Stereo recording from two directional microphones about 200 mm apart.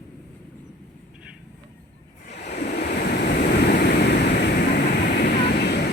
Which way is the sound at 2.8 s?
45° left (ahead or behind).